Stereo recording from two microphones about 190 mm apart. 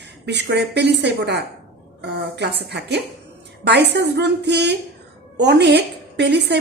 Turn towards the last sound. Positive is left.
turn(degrees=-60)  # may be behind; listen again after turning